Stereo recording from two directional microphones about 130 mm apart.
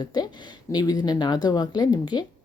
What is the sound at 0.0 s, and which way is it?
Speech, 30° left (ahead or behind).